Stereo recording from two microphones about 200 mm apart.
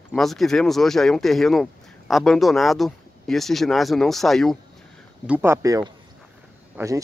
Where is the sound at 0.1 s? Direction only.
Centre (ahead or behind).